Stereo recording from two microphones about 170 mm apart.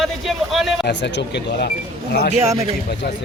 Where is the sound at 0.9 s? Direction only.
90° left.